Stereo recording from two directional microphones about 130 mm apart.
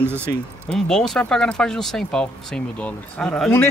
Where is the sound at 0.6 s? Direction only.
5° left (ahead or behind).